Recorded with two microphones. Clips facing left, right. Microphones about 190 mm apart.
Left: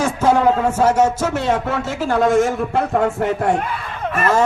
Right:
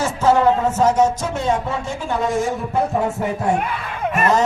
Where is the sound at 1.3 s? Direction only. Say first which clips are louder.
Left 2 dB; 70° left (ahead or behind); by 2.1 s 90° left.